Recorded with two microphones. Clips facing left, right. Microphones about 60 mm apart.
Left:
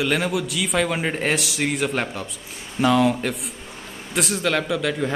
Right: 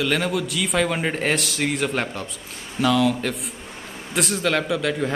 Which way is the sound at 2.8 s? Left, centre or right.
Left.